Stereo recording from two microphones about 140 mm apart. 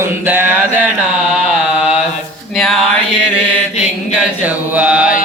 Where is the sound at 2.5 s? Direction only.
Centre (ahead or behind).